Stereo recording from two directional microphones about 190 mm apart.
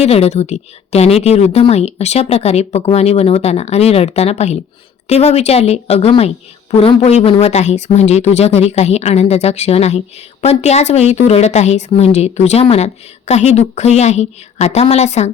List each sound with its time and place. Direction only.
0.0 s a woman's voice: 35° left (ahead or behind)